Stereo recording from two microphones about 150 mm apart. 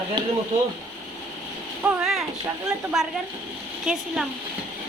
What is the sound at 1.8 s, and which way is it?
Speech, 5° right (ahead or behind).